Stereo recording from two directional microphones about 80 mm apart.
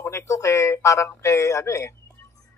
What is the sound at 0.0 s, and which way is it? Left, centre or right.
Speech, left.